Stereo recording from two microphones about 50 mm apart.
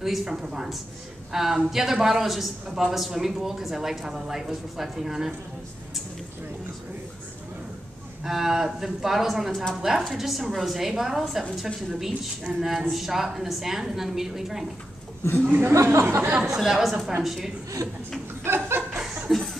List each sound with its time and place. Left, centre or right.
0.0 s a woman's voice: centre
8.2 s a woman's voice: centre
15.6 s speech: right
16.4 s a woman's voice: centre
18.4 s chuckle: right
19.3 s a sound: centre